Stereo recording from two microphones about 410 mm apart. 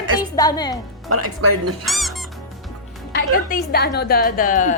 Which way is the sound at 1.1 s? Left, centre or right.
Right.